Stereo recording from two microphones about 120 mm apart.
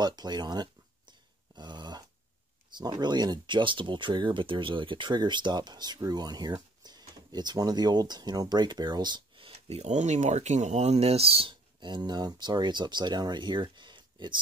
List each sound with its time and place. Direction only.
0.0 s speech: 35° right (ahead or behind)
1.5 s dog: 40° right (ahead or behind)
2.8 s speech: 35° right (ahead or behind)
9.7 s speech: 65° right (ahead or behind); by 14.4 s 40° right (ahead or behind)